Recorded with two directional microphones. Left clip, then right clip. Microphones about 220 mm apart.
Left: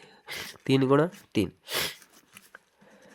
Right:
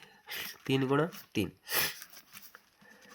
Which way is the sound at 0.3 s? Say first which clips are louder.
Left 6 dB; 45° left (ahead or behind).